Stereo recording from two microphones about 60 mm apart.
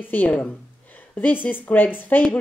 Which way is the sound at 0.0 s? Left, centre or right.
Left.